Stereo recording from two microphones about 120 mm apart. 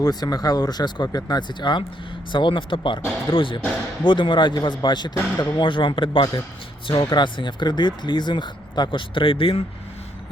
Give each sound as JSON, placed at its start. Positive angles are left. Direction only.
{"t": 0.0, "sound": "speech", "side_deg": 35}